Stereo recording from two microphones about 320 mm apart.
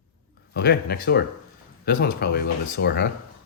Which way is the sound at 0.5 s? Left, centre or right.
Left.